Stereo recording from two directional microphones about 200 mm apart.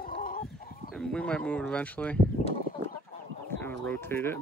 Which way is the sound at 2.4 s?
40° left (ahead or behind).